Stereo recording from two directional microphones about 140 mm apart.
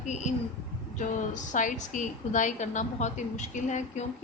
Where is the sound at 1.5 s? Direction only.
65° left (ahead or behind).